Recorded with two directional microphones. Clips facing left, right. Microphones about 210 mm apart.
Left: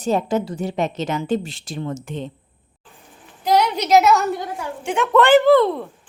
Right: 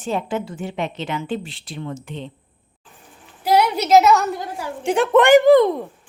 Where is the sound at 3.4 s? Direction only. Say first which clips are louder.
Right 1 dB; 10° right (ahead or behind).